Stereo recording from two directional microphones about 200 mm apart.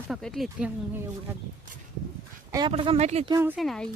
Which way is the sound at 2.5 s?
20° right (ahead or behind).